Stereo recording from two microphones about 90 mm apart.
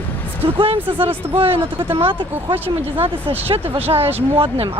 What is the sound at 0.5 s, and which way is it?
Speech, 80° right.